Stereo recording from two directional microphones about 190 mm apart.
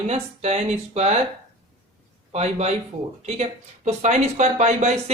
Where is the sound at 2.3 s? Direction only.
35° right (ahead or behind).